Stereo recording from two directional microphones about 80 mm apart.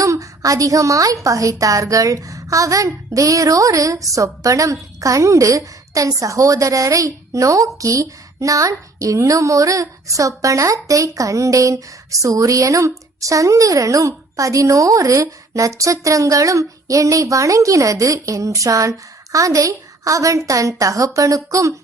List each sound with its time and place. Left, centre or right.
0.0 s a woman's voice: right